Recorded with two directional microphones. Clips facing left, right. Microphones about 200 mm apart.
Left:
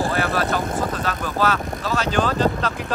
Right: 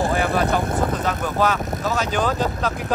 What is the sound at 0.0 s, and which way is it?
Speech, 15° right (ahead or behind).